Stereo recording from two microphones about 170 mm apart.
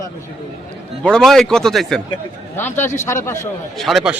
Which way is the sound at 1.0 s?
5° left (ahead or behind).